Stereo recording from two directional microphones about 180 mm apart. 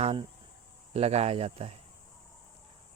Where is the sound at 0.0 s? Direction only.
30° right (ahead or behind).